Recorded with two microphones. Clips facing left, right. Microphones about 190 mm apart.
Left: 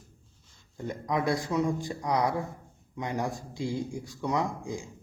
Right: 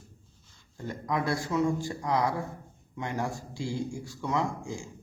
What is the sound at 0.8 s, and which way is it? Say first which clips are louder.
A man's voice: left 1 dB; 20° left (ahead or behind).